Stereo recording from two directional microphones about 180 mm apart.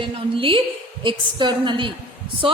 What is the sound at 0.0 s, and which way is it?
A woman's voice, 30° right (ahead or behind).